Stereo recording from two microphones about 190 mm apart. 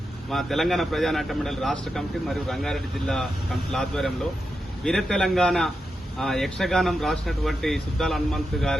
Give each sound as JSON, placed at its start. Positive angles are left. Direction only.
{"t": 0.3, "sound": "speech", "side_deg": 0}